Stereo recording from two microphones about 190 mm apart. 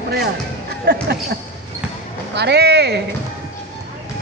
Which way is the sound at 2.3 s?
60° right (ahead or behind).